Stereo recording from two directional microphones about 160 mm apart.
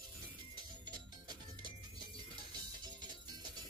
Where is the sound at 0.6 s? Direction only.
30° right (ahead or behind).